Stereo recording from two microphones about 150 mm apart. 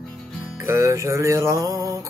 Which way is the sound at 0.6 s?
20° right (ahead or behind).